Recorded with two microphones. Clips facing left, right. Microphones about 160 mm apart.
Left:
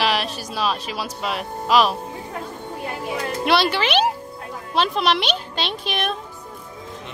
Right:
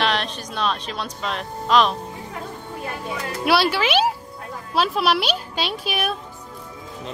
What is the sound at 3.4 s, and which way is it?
Speech, 5° right (ahead or behind).